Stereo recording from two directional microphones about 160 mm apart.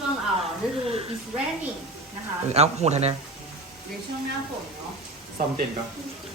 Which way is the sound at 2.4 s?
40° right (ahead or behind).